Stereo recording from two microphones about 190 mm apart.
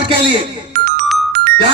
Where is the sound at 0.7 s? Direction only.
55° right (ahead or behind).